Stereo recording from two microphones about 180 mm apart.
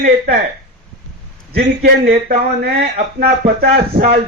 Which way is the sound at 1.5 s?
65° right (ahead or behind).